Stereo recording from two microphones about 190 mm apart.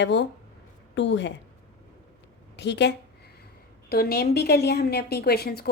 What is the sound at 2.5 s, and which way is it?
A woman's voice, 65° left (ahead or behind).